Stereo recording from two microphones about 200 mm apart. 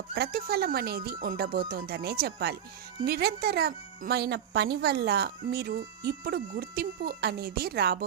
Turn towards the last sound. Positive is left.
turn(degrees=-50)  # may be behind; listen again after turning